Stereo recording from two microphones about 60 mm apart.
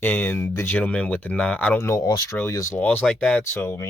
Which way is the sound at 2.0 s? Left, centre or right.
Left.